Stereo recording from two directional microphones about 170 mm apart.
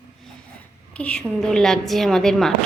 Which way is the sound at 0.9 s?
5° left (ahead or behind).